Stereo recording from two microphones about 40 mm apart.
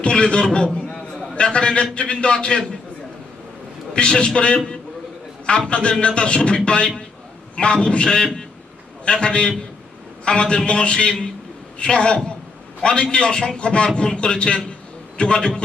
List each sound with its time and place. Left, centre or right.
0.0 s a man's voice: left
3.9 s a man's voice: left